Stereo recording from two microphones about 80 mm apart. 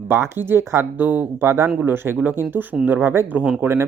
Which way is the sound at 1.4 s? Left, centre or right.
Right.